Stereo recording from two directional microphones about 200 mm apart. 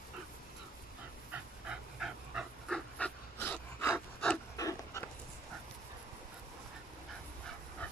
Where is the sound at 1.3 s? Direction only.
5° right (ahead or behind); by 5.1 s 15° left (ahead or behind).